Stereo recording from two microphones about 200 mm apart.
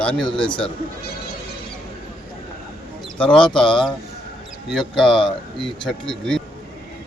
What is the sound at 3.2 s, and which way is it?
Speech, 5° left (ahead or behind).